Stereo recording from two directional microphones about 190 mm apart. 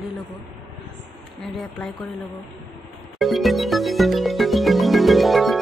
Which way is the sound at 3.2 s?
Centre (ahead or behind).